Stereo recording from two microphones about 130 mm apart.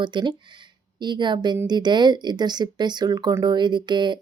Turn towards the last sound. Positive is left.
turn(degrees=-35)  # may be behind; listen again after turning